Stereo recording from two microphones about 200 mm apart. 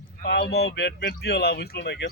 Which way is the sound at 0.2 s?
55° left (ahead or behind).